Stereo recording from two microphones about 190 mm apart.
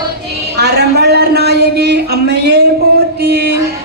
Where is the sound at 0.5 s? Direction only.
60° right (ahead or behind).